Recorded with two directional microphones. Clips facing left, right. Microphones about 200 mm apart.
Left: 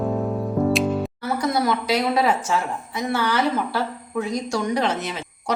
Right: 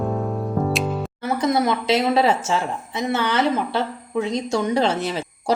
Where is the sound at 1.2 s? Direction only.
20° right (ahead or behind).